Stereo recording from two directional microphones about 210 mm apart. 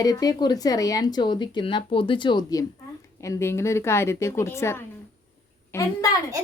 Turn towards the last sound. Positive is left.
turn(degrees=15)  # may be behind; listen again after turning